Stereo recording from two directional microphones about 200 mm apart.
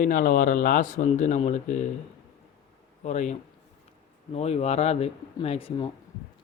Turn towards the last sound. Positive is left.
turn(degrees=30)  # may be behind; listen again after turning